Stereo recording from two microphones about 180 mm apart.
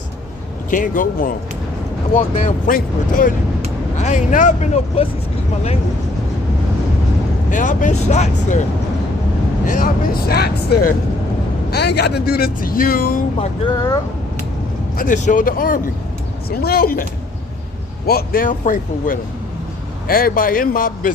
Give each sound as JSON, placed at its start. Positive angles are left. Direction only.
{"t": 0.7, "sound": "speech", "side_deg": 50}
{"t": 7.5, "sound": "speech", "side_deg": 45}
{"t": 9.6, "sound": "speech", "side_deg": 50}
{"t": 14.9, "sound": "speech", "side_deg": 45}